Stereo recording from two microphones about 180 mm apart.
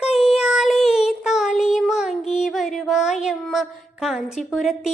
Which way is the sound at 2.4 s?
Centre (ahead or behind).